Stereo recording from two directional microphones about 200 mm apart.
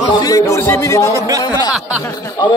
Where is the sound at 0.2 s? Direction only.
15° left (ahead or behind).